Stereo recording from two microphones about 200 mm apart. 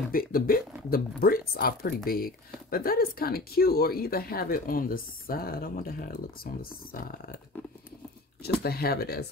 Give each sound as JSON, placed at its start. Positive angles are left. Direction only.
{"t": 0.1, "sound": "speech", "side_deg": 45}
{"t": 8.6, "sound": "speech", "side_deg": 50}